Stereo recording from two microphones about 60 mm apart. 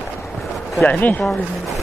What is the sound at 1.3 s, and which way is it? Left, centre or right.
Speech, centre.